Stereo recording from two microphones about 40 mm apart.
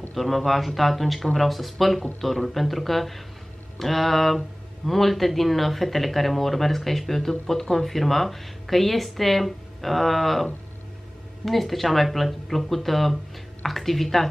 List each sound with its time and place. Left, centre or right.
0.1 s speech: centre